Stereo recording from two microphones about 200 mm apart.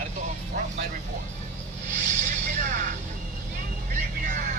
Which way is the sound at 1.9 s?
40° right (ahead or behind).